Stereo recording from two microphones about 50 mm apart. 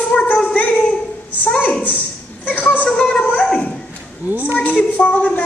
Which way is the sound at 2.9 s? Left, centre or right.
Left.